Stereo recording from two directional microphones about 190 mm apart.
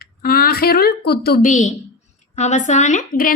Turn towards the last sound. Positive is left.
turn(degrees=45)  # may be behind; listen again after turning